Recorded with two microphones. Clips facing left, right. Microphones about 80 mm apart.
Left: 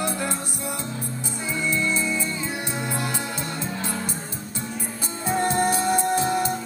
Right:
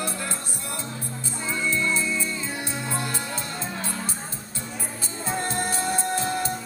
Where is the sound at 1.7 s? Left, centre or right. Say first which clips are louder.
Left 1 dB; centre.